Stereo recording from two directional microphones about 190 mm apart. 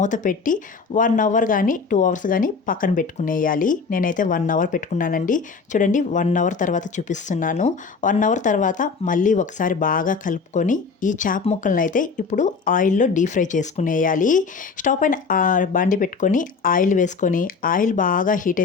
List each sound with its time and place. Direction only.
0.0 s speech: 40° left (ahead or behind)